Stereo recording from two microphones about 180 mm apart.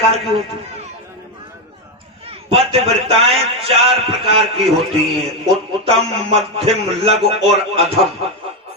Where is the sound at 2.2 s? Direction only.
35° right (ahead or behind).